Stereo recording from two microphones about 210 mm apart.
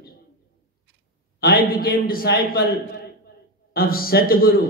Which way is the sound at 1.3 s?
45° left (ahead or behind).